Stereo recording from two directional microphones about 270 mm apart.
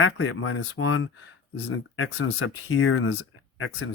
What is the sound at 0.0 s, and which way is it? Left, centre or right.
Speech, left.